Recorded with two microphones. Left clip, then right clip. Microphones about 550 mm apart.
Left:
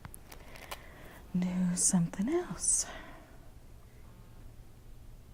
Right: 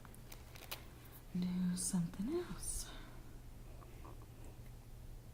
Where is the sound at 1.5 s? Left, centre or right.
Left.